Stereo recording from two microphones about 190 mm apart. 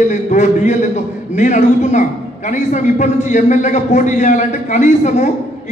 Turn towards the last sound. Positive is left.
turn(degrees=40)  # may be behind; listen again after turning